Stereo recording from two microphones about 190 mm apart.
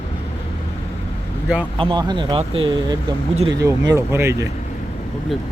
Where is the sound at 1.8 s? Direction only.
25° right (ahead or behind).